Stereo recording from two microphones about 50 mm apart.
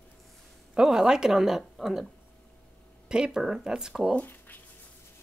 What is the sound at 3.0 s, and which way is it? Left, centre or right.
Speech, centre.